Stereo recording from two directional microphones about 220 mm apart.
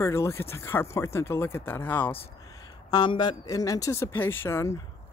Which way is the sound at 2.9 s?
20° left (ahead or behind).